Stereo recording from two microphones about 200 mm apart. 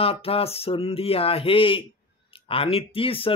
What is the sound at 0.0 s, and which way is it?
Speech, 30° left (ahead or behind).